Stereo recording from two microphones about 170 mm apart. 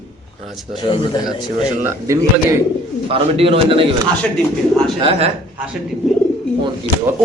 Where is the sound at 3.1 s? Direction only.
35° right (ahead or behind).